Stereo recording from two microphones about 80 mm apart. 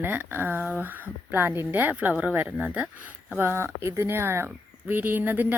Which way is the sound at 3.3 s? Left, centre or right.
Right.